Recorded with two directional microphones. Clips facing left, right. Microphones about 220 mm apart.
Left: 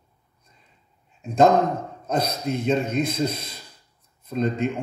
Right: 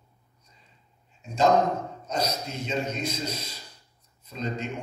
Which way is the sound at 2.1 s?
55° left (ahead or behind).